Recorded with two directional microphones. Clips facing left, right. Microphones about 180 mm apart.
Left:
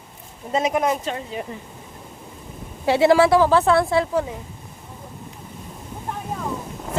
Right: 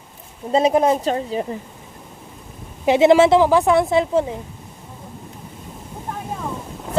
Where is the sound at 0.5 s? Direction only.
30° right (ahead or behind).